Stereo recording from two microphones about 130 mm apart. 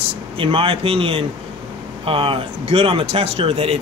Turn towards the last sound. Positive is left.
turn(degrees=-50)  # may be behind; listen again after turning